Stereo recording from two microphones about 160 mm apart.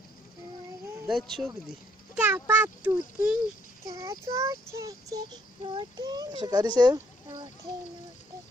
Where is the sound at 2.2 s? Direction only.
10° right (ahead or behind).